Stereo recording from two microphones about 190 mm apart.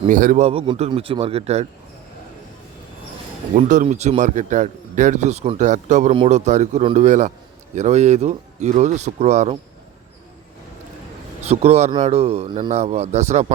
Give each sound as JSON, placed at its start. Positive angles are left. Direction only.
{"t": 0.0, "sound": "speech", "side_deg": -45}
{"t": 3.5, "sound": "speech", "side_deg": -40}
{"t": 11.4, "sound": "speech", "side_deg": -35}
{"t": 12.7, "sound": "speech", "side_deg": -35}